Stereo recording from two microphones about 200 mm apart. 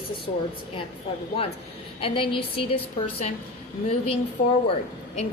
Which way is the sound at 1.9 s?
25° left (ahead or behind).